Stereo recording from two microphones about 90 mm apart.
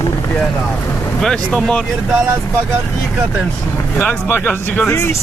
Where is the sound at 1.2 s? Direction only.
5° left (ahead or behind).